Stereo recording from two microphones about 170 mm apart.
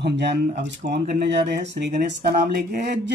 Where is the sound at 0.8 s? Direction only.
70° right (ahead or behind).